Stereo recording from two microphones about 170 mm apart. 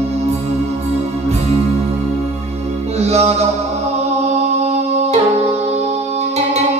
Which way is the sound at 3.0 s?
40° right (ahead or behind).